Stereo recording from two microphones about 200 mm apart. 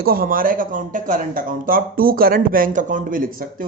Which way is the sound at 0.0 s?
45° right (ahead or behind).